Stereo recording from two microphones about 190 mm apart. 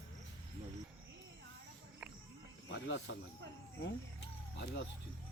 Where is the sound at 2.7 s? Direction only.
80° left.